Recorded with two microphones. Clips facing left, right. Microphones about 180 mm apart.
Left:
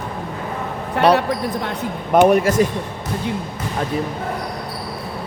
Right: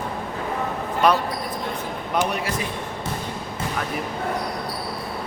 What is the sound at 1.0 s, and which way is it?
Speech, 70° left (ahead or behind).